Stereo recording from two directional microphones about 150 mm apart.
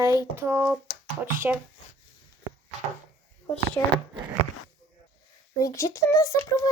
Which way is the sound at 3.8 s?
15° left (ahead or behind).